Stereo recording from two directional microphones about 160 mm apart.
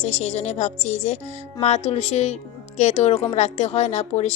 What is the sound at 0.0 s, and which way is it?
A woman's voice, 40° left (ahead or behind).